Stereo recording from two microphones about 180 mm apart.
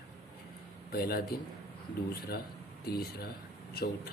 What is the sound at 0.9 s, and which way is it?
Speech, 60° left (ahead or behind).